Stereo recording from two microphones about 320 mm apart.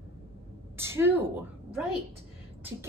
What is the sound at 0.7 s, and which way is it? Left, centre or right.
A woman's voice, centre.